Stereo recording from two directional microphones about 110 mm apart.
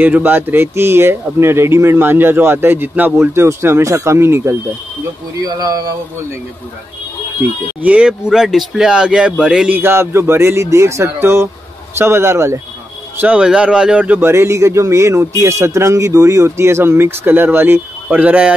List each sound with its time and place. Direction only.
0.0 s a man's voice: 15° right (ahead or behind)
5.4 s speech: 35° right (ahead or behind)
7.8 s a man's voice: 10° right (ahead or behind)
13.2 s a man's voice: 10° right (ahead or behind)